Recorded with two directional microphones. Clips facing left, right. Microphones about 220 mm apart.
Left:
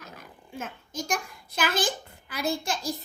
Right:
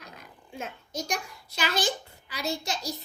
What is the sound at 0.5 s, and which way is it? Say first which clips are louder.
A child's voice: even; 50° left (ahead or behind).